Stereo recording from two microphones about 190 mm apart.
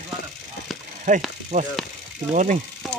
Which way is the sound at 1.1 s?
40° right (ahead or behind).